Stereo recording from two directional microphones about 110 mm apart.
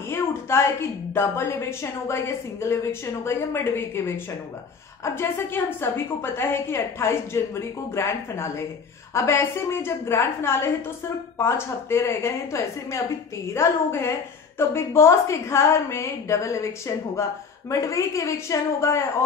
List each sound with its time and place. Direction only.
0.1 s a woman's voice: 25° left (ahead or behind)